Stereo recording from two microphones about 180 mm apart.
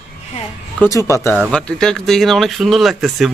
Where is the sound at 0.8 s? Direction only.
15° left (ahead or behind).